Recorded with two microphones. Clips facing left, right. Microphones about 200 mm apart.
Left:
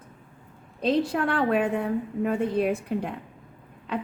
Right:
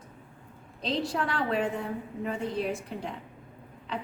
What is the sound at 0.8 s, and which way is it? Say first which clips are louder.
A woman's voice: left 6 dB; 55° left (ahead or behind).